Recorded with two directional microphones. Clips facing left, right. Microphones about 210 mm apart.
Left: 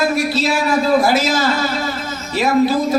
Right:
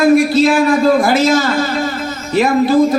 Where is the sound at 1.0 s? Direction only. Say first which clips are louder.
Right 4 dB; 50° right (ahead or behind).